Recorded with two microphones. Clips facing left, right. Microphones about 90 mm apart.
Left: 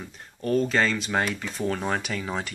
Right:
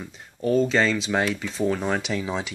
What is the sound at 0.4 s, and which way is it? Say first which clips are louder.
Speech: right 3 dB; 15° right (ahead or behind).